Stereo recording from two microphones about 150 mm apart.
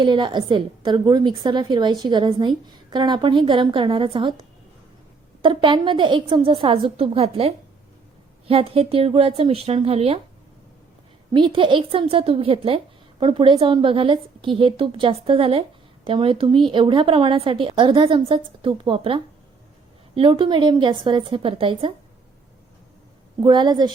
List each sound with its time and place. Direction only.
0.0 s a woman's voice: 30° right (ahead or behind)
11.3 s a woman's voice: 35° right (ahead or behind)
23.4 s a woman's voice: 30° right (ahead or behind)